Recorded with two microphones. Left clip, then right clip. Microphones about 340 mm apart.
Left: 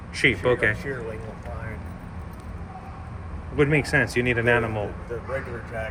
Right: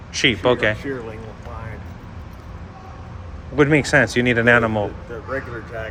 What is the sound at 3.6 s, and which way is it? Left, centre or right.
Speech, centre.